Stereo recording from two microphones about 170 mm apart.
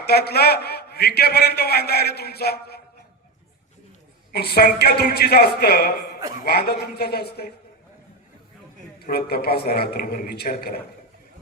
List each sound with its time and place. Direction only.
0.0 s a man's voice: 70° left (ahead or behind)
4.3 s a man's voice: 70° left (ahead or behind)
9.0 s a man's voice: 65° left (ahead or behind)